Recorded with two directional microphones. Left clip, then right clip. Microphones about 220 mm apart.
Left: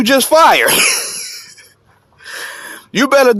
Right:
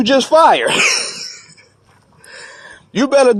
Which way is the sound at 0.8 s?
15° left (ahead or behind).